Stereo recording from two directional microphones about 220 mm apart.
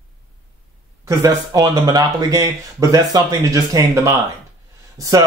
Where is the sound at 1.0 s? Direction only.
15° right (ahead or behind).